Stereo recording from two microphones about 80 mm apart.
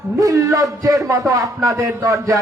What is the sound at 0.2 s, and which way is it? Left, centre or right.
Speech, right.